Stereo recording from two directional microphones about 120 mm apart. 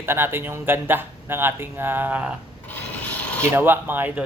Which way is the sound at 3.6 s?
15° right (ahead or behind).